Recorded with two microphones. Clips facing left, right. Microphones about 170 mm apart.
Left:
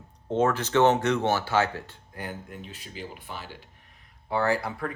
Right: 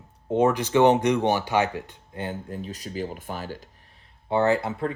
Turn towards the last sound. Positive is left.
turn(degrees=-25)  # may be behind; listen again after turning